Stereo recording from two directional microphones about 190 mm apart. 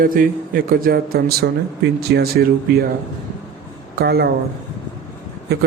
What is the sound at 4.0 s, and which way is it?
Speech, 55° right (ahead or behind).